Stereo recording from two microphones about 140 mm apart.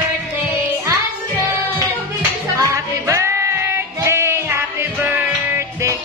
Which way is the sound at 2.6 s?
20° right (ahead or behind).